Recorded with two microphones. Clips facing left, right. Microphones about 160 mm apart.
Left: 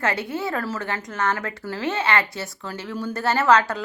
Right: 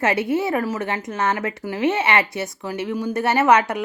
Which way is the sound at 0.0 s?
20° right (ahead or behind).